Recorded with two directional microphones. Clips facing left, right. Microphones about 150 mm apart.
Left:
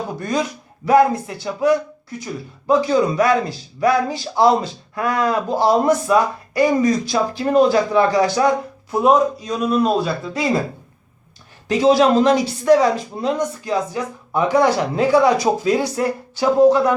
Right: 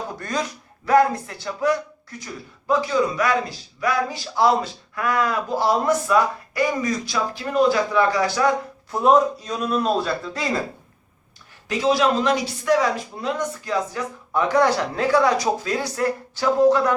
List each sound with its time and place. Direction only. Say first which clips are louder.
0.2 s speech: left 6 dB; 15° left (ahead or behind)
2.6 s a man's voice: left 5 dB; 25° left (ahead or behind)
8.4 s speech: left 3 dB; 5° left (ahead or behind)
11.7 s a man's voice: left 6 dB; 30° left (ahead or behind)